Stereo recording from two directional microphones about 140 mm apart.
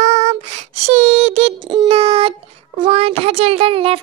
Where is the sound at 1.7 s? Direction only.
40° right (ahead or behind).